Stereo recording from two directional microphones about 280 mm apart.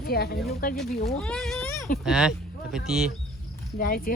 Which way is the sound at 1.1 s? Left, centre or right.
Centre.